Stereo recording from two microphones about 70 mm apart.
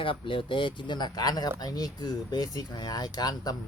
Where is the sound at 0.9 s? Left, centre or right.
Left.